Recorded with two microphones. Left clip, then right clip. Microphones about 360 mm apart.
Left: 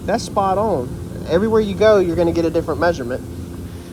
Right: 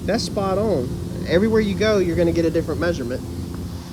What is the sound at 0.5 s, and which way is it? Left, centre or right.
Speech, left.